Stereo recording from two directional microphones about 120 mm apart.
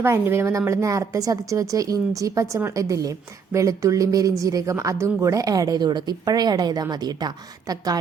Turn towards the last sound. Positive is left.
turn(degrees=-35)  # may be behind; listen again after turning